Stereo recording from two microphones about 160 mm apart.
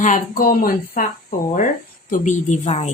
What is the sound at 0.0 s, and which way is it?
A woman's voice, 60° left (ahead or behind).